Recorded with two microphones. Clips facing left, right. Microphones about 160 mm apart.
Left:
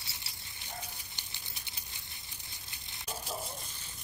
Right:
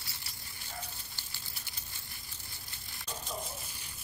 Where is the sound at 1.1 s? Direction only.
20° left (ahead or behind).